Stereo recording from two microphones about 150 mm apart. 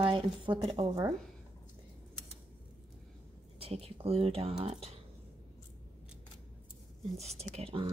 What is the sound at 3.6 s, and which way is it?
Speech, 40° right (ahead or behind).